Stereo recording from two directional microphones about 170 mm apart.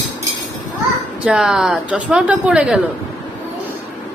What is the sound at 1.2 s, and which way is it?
Speech, 5° right (ahead or behind).